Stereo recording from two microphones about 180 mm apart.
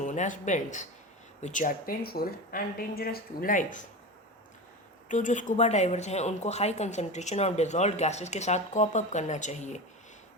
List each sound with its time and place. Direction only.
0.0 s a woman's voice: 45° left (ahead or behind)
5.0 s speech: 45° left (ahead or behind)